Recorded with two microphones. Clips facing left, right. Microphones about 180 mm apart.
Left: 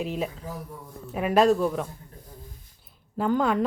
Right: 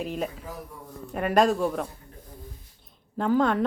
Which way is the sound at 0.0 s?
Centre (ahead or behind).